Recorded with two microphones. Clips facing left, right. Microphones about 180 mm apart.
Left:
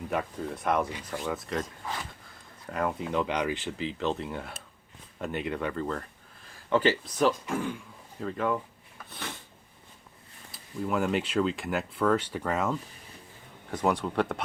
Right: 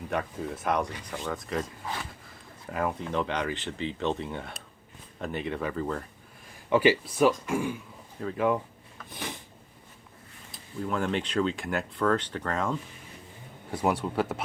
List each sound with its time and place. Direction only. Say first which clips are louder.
0.1 s speech: right 1 dB; centre (ahead or behind)
2.2 s a sound: right 1 dB; centre (ahead or behind)
3.0 s speech: left 1 dB; 5° left (ahead or behind); by 8.6 s 15° right (ahead or behind)
9.0 s a sound: right 2 dB; 15° right (ahead or behind)
10.5 s speech: left 1 dB; 5° left (ahead or behind)
13.7 s speech: even; 10° right (ahead or behind)